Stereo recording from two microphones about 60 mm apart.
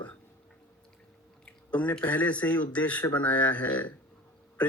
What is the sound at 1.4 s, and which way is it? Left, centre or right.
Speech, left.